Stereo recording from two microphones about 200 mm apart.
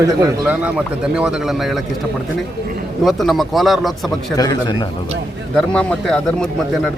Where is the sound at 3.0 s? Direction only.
Centre (ahead or behind).